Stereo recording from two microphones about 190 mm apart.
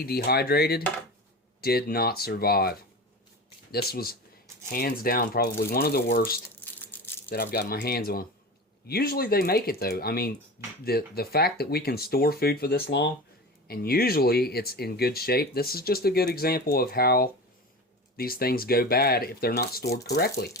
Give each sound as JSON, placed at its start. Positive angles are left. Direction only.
{"t": 0.0, "sound": "speech", "side_deg": 55}
{"t": 6.5, "sound": "a sound", "side_deg": 10}
{"t": 7.3, "sound": "speech", "side_deg": 50}